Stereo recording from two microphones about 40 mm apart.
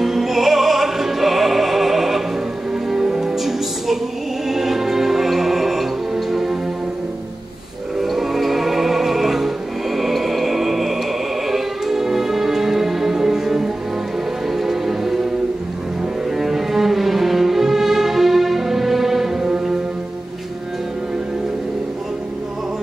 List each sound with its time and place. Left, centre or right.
0.0 s music: centre
8.0 s music: centre
16.3 s music: centre